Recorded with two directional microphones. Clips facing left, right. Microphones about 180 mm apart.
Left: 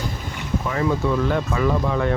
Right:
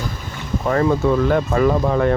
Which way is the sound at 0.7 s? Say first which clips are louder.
Right 6 dB; 50° right (ahead or behind).